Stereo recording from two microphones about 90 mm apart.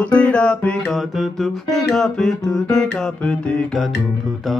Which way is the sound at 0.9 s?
Centre (ahead or behind).